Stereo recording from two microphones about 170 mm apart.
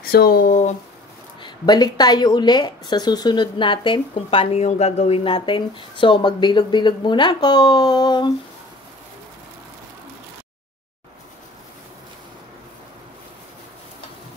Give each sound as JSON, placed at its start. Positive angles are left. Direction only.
{"t": 0.0, "sound": "speech", "side_deg": 65}
{"t": 1.4, "sound": "speech", "side_deg": 25}